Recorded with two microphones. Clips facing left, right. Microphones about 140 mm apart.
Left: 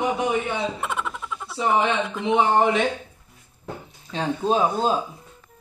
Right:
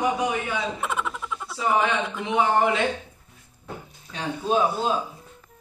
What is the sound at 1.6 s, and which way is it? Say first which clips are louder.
Speech: left 2 dB; 25° left (ahead or behind).